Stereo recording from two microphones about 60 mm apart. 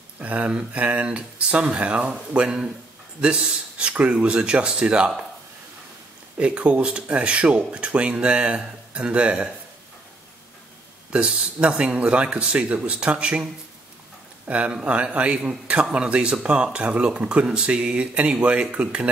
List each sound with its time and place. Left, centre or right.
0.2 s speech: right
6.3 s speech: right
11.1 s speech: centre